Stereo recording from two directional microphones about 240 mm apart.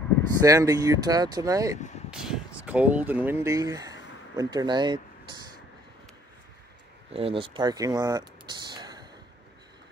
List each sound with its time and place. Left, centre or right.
0.4 s speech: centre
2.0 s speech: centre
7.1 s speech: right